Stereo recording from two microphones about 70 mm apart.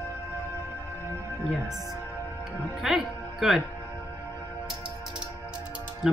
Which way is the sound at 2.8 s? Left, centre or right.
Centre.